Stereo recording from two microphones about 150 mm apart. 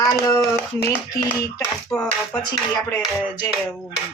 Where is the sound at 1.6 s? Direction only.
10° left (ahead or behind).